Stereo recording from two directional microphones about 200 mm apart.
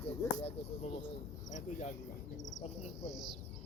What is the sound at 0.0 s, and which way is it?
Speech, 30° left (ahead or behind).